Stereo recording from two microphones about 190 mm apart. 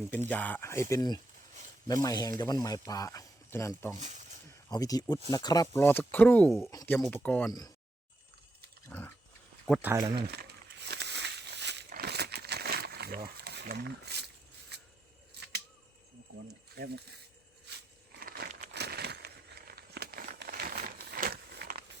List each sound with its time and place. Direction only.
0.3 s speech: 10° left (ahead or behind)
3.9 s speech: 40° right (ahead or behind)
4.7 s speech: 20° left (ahead or behind); by 6.7 s 5° left (ahead or behind)
6.7 s speech: 15° left (ahead or behind)
8.9 s pig: 10° left (ahead or behind)
9.8 s speech: 15° right (ahead or behind)
10.8 s a sound: 65° right (ahead or behind)
16.7 s speech: 60° right (ahead or behind)
17.7 s a sound: 60° right (ahead or behind)